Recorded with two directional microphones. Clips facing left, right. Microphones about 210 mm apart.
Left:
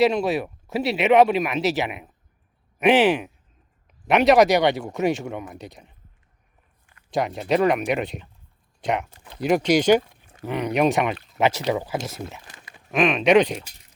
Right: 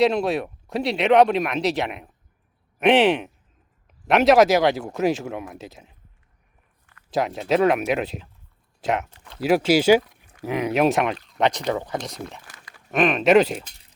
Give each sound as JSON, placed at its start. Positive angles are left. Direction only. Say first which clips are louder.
{"t": 0.0, "sound": "speech", "louder": "even", "side_deg": 0}
{"t": 7.1, "sound": "speech", "louder": "right 1 dB", "side_deg": 0}
{"t": 10.0, "sound": "a sound", "louder": "right 1 dB", "side_deg": 25}
{"t": 10.4, "sound": "speech", "louder": "right 1 dB", "side_deg": -10}
{"t": 12.5, "sound": "crumpling", "louder": "left 1 dB", "side_deg": 20}
{"t": 12.9, "sound": "speech", "louder": "right 1 dB", "side_deg": 0}